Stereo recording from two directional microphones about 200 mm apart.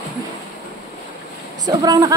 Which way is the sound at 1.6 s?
20° right (ahead or behind).